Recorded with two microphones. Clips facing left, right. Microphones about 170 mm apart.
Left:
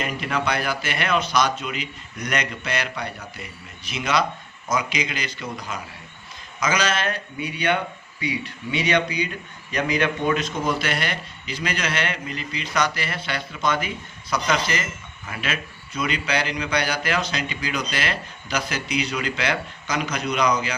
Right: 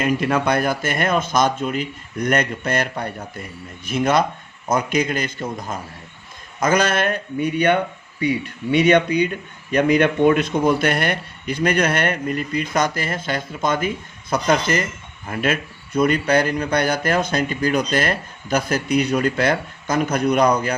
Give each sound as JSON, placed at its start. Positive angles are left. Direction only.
{"t": 0.0, "sound": "speech", "side_deg": -50}